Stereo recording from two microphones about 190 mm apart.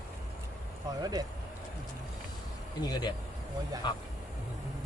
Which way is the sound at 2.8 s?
20° left (ahead or behind).